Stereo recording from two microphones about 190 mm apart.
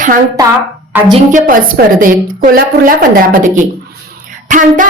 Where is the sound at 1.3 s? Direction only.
45° right (ahead or behind).